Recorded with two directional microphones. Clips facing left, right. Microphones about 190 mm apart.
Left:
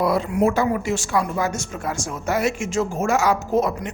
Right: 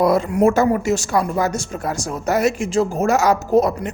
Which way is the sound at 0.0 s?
45° right (ahead or behind).